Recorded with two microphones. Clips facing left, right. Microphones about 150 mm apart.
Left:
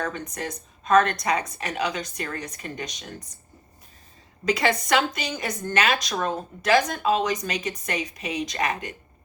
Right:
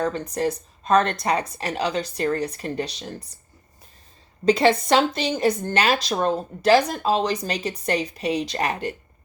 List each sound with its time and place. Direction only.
0.0 s speech: 35° right (ahead or behind)
4.4 s speech: 30° right (ahead or behind)